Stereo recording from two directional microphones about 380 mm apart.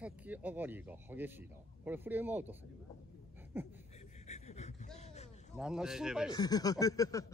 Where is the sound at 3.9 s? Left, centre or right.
Centre.